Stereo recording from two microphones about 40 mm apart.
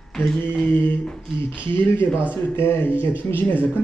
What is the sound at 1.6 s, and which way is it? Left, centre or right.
Speech, left.